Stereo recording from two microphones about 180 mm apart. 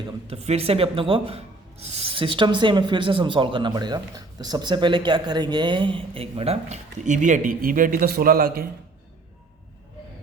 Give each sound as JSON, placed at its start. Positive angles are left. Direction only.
{"t": 0.3, "sound": "speech", "side_deg": -35}